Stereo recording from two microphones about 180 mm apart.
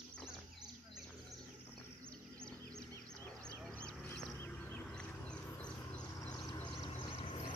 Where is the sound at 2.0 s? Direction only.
5° left (ahead or behind).